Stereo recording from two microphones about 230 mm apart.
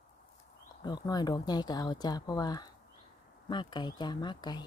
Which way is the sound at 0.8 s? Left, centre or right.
Centre.